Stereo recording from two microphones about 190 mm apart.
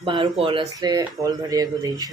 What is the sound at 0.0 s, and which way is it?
Speech, 30° right (ahead or behind).